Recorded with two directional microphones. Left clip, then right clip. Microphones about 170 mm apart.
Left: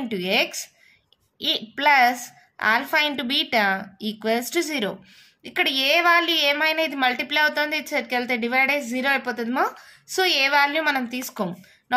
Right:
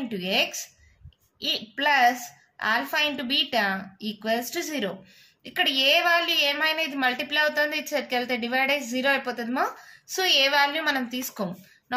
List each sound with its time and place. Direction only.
0.1 s a woman's voice: 50° left (ahead or behind)